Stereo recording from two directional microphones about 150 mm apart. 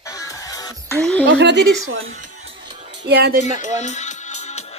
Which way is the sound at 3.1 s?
90° right.